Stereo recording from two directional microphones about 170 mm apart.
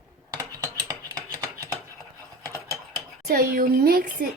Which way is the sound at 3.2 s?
60° right (ahead or behind).